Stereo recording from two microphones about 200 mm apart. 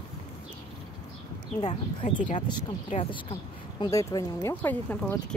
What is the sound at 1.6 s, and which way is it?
Speech, 35° left (ahead or behind).